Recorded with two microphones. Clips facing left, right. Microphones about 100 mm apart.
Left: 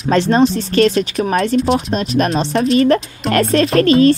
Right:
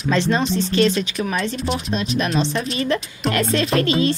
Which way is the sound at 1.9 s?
45° left (ahead or behind).